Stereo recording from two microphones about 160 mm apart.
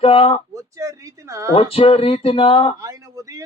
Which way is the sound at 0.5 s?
20° right (ahead or behind).